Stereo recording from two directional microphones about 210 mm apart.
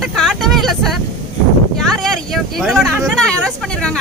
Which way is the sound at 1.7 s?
Centre (ahead or behind).